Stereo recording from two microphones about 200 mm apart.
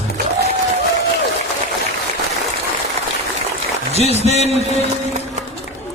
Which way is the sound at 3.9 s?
30° left (ahead or behind).